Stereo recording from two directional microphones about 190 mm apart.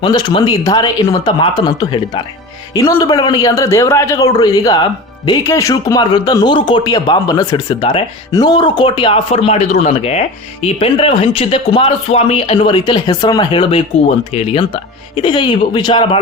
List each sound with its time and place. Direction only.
0.0 s a man's voice: 25° left (ahead or behind)